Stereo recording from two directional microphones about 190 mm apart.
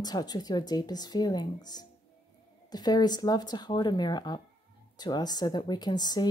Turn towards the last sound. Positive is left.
turn(degrees=20)  # may be behind; listen again after turning